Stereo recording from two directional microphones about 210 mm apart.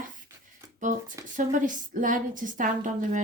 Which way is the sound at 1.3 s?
40° right (ahead or behind).